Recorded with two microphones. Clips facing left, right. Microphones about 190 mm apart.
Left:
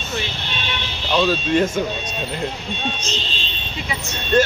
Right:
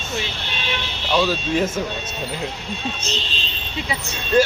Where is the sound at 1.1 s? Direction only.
5° right (ahead or behind).